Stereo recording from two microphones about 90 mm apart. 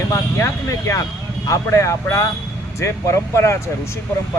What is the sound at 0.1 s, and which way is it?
Speech, 35° left (ahead or behind).